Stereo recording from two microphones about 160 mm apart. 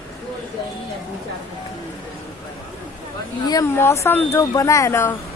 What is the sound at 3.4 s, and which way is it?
Speech, 20° left (ahead or behind).